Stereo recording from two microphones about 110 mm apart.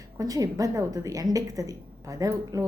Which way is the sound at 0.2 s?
35° right (ahead or behind).